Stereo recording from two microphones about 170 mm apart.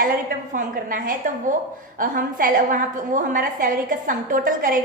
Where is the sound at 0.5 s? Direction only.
50° right (ahead or behind).